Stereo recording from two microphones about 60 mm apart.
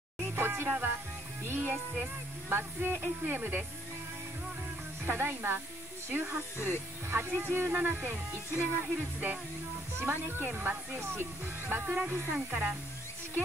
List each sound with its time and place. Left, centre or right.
0.2 s music: right
0.7 s speech: right
5.0 s speech: right
7.8 s speech: right
8.9 s music: right
10.1 s speech: right